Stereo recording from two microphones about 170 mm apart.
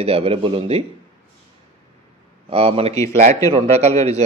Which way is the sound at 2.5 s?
35° right (ahead or behind).